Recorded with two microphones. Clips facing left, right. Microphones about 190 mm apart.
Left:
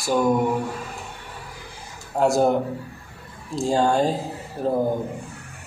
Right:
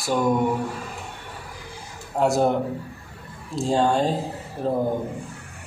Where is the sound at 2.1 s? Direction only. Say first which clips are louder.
Left 1 dB; centre (ahead or behind).